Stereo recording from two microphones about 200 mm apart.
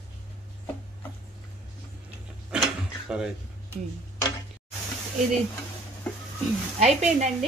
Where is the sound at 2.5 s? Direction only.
5° right (ahead or behind).